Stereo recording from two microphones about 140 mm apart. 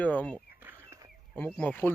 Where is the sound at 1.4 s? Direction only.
10° left (ahead or behind).